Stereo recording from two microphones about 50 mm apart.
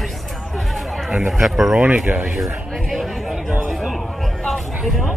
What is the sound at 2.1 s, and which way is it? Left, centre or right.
Speech, centre.